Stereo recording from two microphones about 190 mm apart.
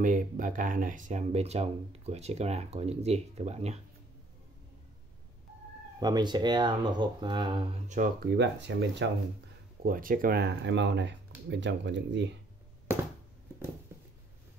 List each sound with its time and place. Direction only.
0.0 s speech: 45° right (ahead or behind)
5.9 s speech: 20° right (ahead or behind)
8.0 s speech: 45° right (ahead or behind)
8.4 s speech: 65° right (ahead or behind)
9.8 s speech: 45° right (ahead or behind); by 12.4 s 70° right (ahead or behind)
13.9 s a sound: 15° right (ahead or behind)